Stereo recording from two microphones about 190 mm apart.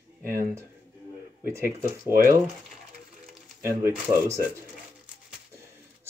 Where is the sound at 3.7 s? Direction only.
15° right (ahead or behind).